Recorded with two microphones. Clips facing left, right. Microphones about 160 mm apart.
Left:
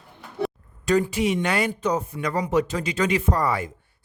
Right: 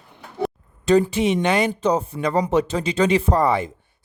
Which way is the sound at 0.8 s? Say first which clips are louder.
Right 4 dB; 25° right (ahead or behind).